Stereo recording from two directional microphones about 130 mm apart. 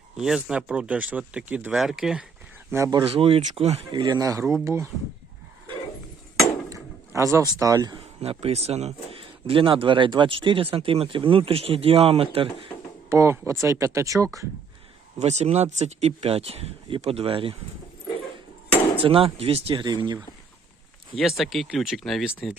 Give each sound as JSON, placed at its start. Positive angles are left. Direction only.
{"t": 0.2, "sound": "speech", "side_deg": -5}
{"t": 3.1, "sound": "a man's voice", "side_deg": -45}
{"t": 3.9, "sound": "speech", "side_deg": -30}
{"t": 6.7, "sound": "a sound", "side_deg": -25}
{"t": 7.6, "sound": "speech", "side_deg": -30}
{"t": 8.2, "sound": "a man's voice", "side_deg": -50}
{"t": 13.1, "sound": "speech", "side_deg": -20}
{"t": 15.2, "sound": "a man's voice", "side_deg": -55}
{"t": 19.0, "sound": "a man's voice", "side_deg": -45}
{"t": 21.2, "sound": "speech", "side_deg": 0}